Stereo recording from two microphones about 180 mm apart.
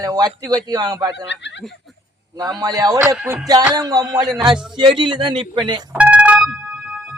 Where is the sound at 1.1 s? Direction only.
80° left.